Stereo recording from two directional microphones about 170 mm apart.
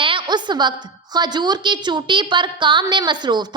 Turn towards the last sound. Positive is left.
turn(degrees=-25)  # may be behind; listen again after turning